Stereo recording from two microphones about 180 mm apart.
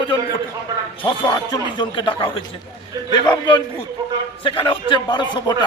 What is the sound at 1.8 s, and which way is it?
Speech, 30° left (ahead or behind).